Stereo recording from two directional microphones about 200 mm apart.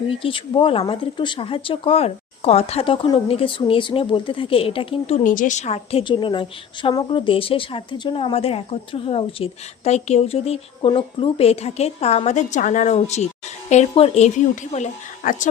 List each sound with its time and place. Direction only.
0.1 s a woman's voice: 25° left (ahead or behind)